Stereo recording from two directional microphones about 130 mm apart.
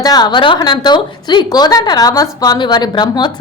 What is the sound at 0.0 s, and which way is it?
A woman's voice, 30° left (ahead or behind).